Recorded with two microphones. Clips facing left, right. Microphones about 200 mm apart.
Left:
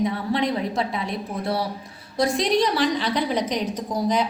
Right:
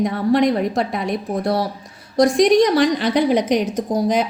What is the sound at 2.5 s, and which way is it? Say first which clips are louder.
A woman's voice: right 6 dB; 50° right (ahead or behind).